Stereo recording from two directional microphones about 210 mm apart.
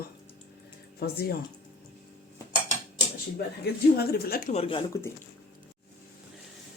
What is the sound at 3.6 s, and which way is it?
Speech, 50° left (ahead or behind).